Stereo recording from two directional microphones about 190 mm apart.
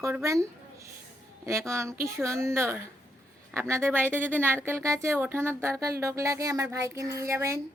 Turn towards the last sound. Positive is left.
turn(degrees=-15)  # may be behind; listen again after turning